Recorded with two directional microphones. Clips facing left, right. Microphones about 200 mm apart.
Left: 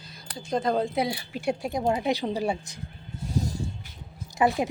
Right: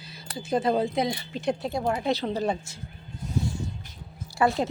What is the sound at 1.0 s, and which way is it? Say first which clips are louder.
A woman's voice: right 1 dB; 10° left (ahead or behind).